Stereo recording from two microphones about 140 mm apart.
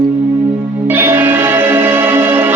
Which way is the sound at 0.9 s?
15° right (ahead or behind).